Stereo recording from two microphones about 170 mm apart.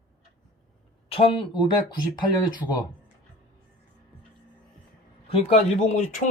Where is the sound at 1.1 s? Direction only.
30° left (ahead or behind).